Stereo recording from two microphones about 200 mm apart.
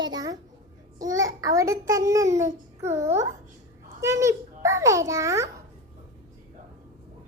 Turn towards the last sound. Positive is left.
turn(degrees=-15)  # may be behind; listen again after turning